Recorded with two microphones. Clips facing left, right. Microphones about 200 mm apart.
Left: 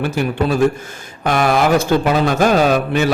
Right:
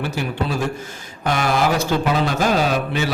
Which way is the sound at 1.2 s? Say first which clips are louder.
Left 5 dB; 55° left (ahead or behind).